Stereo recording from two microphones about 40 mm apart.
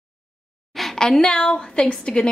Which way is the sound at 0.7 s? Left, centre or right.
Centre.